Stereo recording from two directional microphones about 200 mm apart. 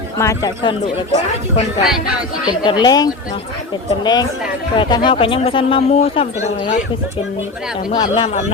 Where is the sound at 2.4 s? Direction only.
20° left (ahead or behind).